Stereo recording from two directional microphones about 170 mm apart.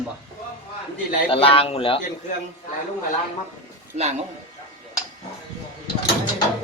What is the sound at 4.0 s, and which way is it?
Speech, 40° right (ahead or behind).